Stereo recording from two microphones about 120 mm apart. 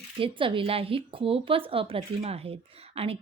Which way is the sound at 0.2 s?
45° right (ahead or behind).